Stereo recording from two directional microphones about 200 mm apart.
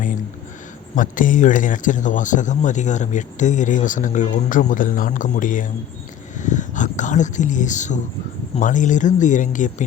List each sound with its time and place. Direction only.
0.9 s speech: 40° left (ahead or behind)